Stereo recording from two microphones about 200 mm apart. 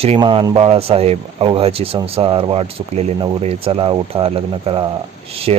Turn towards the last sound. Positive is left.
turn(degrees=-30)  # may be behind; listen again after turning